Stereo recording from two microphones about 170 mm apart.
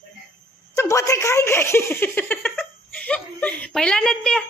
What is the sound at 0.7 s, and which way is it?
A woman's voice, 20° left (ahead or behind).